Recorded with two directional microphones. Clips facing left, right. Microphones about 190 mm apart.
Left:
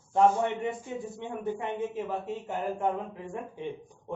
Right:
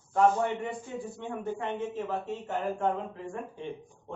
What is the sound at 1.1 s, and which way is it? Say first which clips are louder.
A man's voice: left 1 dB; 15° left (ahead or behind).